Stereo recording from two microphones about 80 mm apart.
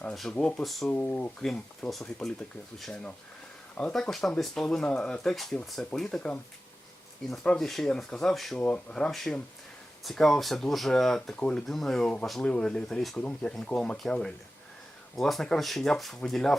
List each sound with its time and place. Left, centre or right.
0.1 s speech: centre
0.6 s speech: centre
0.9 s speech: centre
8.5 s speech: centre